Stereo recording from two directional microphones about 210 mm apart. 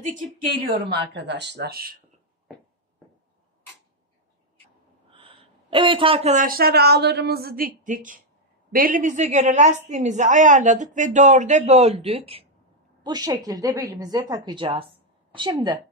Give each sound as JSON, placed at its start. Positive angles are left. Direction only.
{"t": 0.7, "sound": "speech", "side_deg": -50}
{"t": 5.1, "sound": "a man's voice", "side_deg": -25}